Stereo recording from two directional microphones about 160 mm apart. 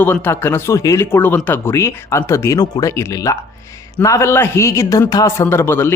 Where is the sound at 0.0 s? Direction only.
15° left (ahead or behind).